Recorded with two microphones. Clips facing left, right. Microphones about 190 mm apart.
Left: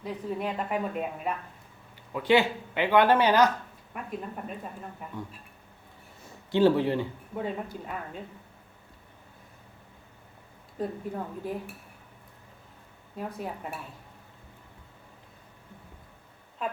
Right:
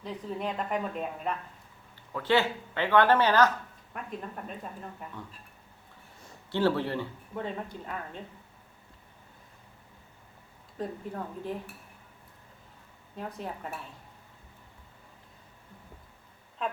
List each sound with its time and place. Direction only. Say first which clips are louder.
0.0 s a woman's voice: left 2 dB; 5° left (ahead or behind)
6.5 s speech: left 5 dB; 15° left (ahead or behind)
10.8 s speech: left 3 dB; 10° left (ahead or behind)
13.1 s speech: left 2 dB; 10° left (ahead or behind)
16.6 s a sound: even; 5° left (ahead or behind)